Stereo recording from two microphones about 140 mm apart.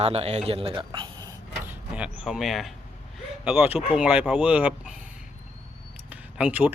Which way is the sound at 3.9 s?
10° right (ahead or behind).